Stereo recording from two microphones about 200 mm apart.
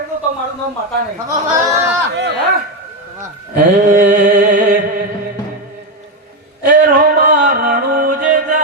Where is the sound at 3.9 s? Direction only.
40° right (ahead or behind).